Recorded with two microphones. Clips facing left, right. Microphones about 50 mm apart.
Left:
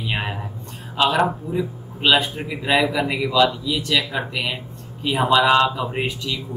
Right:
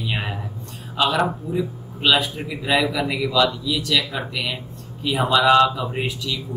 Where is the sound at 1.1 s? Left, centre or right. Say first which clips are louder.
Left 1 dB; centre.